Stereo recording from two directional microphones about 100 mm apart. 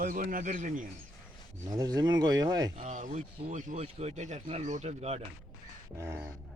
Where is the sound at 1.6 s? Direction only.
40° right (ahead or behind).